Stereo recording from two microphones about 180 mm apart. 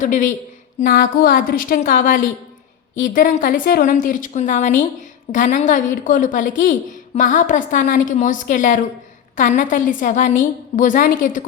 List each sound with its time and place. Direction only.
0.0 s a woman's voice: 45° left (ahead or behind)